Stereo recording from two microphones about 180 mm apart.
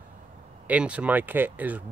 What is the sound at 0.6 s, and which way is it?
Speech, 5° right (ahead or behind).